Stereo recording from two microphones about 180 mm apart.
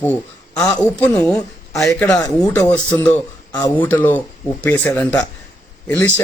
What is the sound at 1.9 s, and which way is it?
Speech, 20° left (ahead or behind).